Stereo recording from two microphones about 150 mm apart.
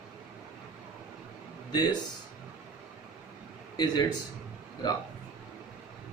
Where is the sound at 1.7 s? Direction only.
30° left (ahead or behind).